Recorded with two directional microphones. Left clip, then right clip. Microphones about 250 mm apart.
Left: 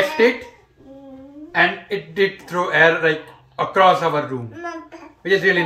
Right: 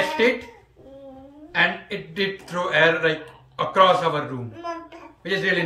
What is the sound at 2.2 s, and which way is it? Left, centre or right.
Speech, centre.